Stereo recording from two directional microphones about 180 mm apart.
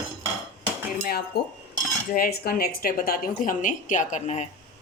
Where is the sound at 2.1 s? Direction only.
55° left (ahead or behind).